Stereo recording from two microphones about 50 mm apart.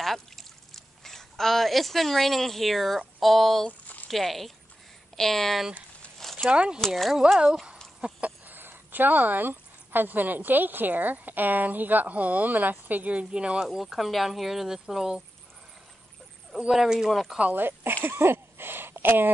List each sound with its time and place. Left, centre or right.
0.0 s speech: centre
3.8 s a sound: left
4.1 s speech: centre
6.5 s speech: right
7.2 s speech: centre
8.0 s a sound: right
8.5 s speech: right
13.7 s speech: centre
16.7 s speech: centre
17.6 s speech: right
18.0 s a sound: right